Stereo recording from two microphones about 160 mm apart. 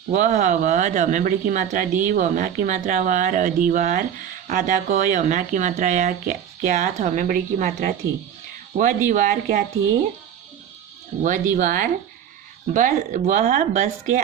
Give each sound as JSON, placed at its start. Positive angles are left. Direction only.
{"t": 0.1, "sound": "speech", "side_deg": -50}
{"t": 11.2, "sound": "speech", "side_deg": -50}